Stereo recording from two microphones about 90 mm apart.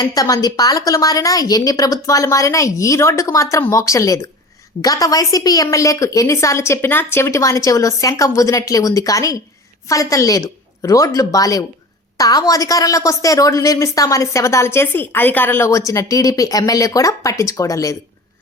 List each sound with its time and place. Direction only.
0.0 s a woman's voice: 40° left (ahead or behind); by 15.7 s 25° left (ahead or behind)
15.7 s a woman's voice: 35° left (ahead or behind)